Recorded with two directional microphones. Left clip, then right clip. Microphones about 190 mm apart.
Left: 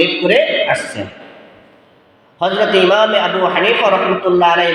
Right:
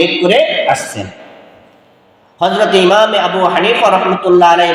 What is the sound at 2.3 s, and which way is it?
A man's voice, 25° right (ahead or behind).